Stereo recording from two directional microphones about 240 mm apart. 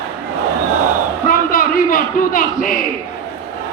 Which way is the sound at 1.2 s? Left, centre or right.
Left.